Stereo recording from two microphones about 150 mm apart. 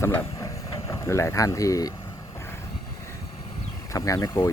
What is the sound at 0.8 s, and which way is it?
Speech, 20° left (ahead or behind).